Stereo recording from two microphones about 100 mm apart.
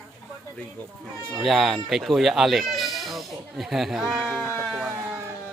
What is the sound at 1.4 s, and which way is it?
Speech, centre (ahead or behind).